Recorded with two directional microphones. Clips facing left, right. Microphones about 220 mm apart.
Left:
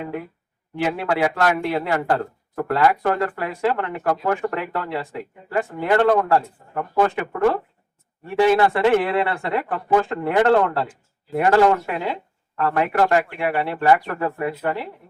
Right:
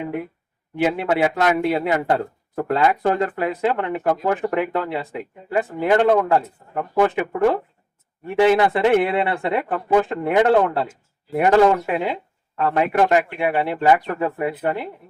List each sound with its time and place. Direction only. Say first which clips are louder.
0.8 s speech: right 2 dB; 20° right (ahead or behind)